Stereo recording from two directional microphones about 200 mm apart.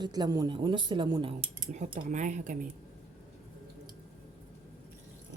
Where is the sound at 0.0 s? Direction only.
20° right (ahead or behind).